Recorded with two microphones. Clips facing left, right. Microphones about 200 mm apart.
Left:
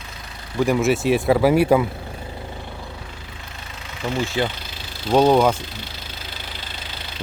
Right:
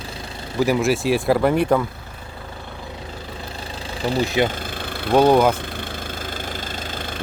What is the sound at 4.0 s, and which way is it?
Speech, 35° right (ahead or behind).